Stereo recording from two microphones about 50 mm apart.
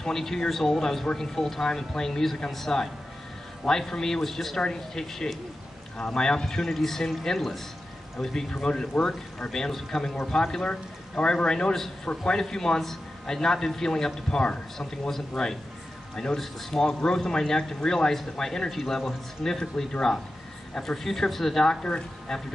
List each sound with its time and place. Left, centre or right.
0.0 s speech: centre
9.5 s speech: centre